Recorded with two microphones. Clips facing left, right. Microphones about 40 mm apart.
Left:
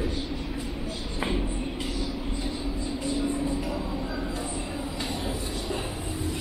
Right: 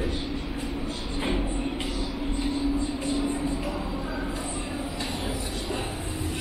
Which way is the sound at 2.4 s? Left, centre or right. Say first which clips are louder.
Right 5 dB; centre.